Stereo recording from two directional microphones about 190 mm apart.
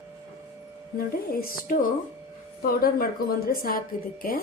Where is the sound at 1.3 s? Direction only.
50° left (ahead or behind).